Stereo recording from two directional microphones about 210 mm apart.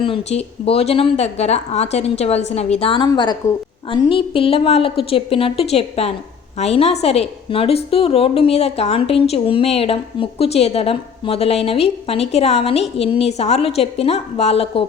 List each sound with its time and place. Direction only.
0.0 s a woman's voice: 25° left (ahead or behind)